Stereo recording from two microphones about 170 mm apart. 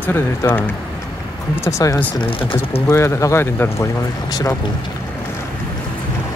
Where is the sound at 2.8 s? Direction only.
15° left (ahead or behind).